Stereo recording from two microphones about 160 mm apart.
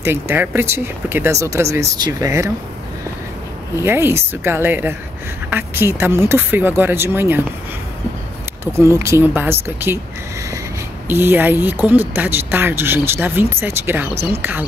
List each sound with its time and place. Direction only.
0.0 s speech: 15° right (ahead or behind)
3.7 s speech: 15° right (ahead or behind)
8.7 s speech: 15° right (ahead or behind)
11.1 s speech: 15° right (ahead or behind)